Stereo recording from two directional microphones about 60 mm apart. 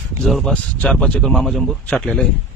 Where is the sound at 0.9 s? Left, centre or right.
Centre.